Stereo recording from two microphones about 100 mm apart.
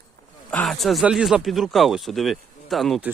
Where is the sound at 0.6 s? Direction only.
Centre (ahead or behind).